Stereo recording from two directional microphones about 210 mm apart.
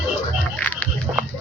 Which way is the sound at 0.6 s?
5° left (ahead or behind).